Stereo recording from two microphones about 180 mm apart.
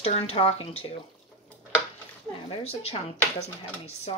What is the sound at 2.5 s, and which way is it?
Speech, 35° left (ahead or behind).